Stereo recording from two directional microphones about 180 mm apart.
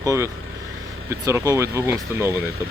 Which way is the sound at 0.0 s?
20° right (ahead or behind).